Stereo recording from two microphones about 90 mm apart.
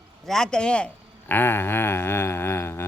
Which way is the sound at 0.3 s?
5° left (ahead or behind).